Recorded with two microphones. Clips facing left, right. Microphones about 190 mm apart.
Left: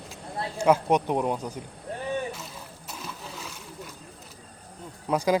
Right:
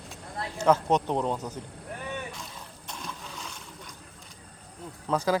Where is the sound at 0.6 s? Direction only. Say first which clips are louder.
Left 1 dB; 10° left (ahead or behind).